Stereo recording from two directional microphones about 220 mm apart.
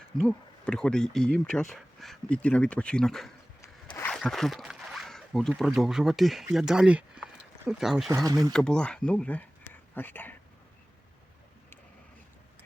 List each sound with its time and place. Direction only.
0.2 s speech: 5° left (ahead or behind)
3.6 s a sound: 15° left (ahead or behind)
4.1 s speech: centre (ahead or behind)
8.1 s speech: 15° right (ahead or behind)
8.5 s speech: 5° left (ahead or behind)